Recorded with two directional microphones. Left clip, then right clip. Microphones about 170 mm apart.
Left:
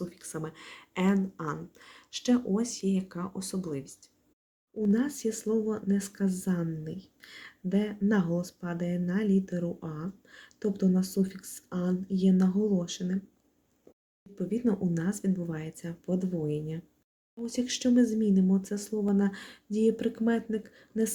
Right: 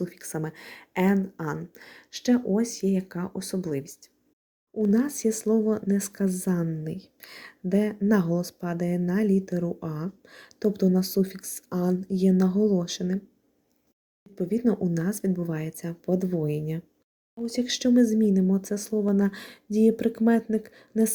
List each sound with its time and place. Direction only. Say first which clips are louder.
0.0 s speech: right 5 dB; 35° right (ahead or behind)
14.3 s speech: right 5 dB; 30° right (ahead or behind)